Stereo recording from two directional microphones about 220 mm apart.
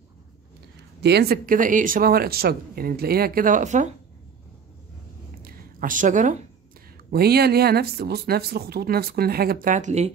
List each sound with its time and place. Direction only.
1.0 s speech: 45° right (ahead or behind)
5.4 s a sound: 40° right (ahead or behind)
7.1 s speech: 45° right (ahead or behind)